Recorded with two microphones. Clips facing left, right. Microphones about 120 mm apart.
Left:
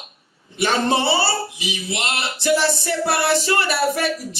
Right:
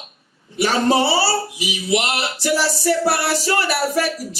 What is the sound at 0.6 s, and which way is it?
Music, 25° left (ahead or behind).